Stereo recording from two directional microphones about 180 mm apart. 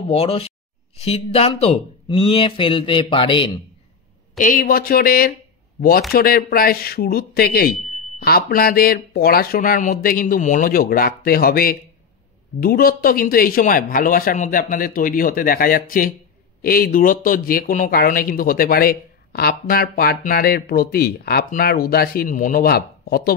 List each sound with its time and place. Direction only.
0.1 s speech: 35° left (ahead or behind)
4.4 s speech: 50° left (ahead or behind)